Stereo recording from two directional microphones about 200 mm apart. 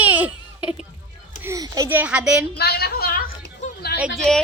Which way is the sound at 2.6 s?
50° left (ahead or behind).